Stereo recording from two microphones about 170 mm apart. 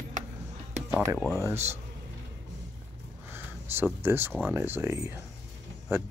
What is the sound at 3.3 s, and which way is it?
Speech, 15° right (ahead or behind).